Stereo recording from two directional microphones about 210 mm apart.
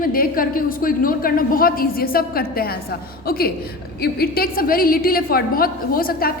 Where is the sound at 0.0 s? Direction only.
45° left (ahead or behind).